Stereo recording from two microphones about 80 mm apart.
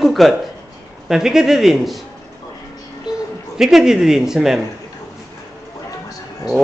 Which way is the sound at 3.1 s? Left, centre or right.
Centre.